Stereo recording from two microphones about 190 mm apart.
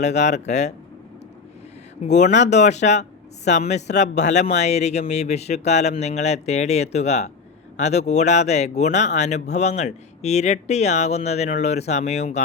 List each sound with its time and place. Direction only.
0.0 s speech: 35° left (ahead or behind)
2.0 s speech: 40° left (ahead or behind)